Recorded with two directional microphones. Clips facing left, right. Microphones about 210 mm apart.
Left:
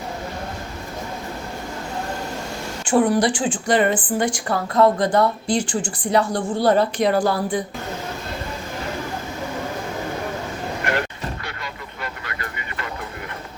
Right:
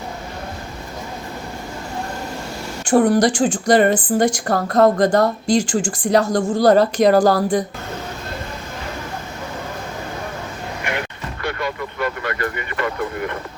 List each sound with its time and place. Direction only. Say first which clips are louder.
2.8 s a woman's voice: right 3 dB; 40° right (ahead or behind)
11.4 s vehicle: right 10 dB; 55° right (ahead or behind)